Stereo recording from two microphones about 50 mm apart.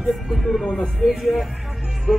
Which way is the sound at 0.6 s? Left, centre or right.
Centre.